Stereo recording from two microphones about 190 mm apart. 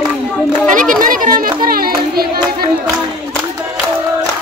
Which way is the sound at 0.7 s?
45° right (ahead or behind).